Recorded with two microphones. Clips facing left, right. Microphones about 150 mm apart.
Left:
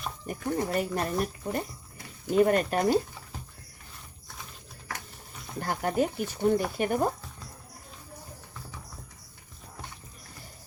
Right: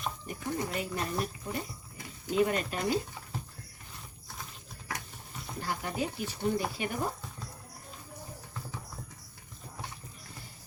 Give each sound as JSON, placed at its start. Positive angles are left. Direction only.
{"t": 0.3, "sound": "speech", "side_deg": 50}
{"t": 5.5, "sound": "speech", "side_deg": 50}